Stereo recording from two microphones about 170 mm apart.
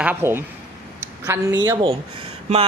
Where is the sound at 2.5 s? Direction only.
40° right (ahead or behind).